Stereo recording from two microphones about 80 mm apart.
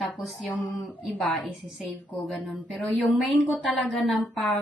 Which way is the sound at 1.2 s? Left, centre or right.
Centre.